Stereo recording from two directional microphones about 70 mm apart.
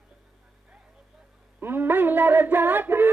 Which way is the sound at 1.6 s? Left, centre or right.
Right.